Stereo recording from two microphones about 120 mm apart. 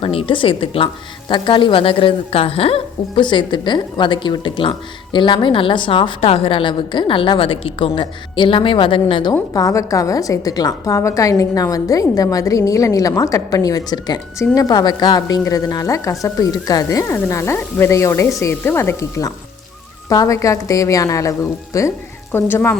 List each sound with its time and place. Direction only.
0.0 s a woman's voice: 50° left (ahead or behind)
9.5 s a woman's voice: 30° left (ahead or behind)